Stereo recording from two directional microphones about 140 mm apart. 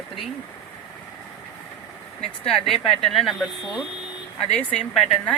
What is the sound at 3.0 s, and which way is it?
Speech, centre (ahead or behind).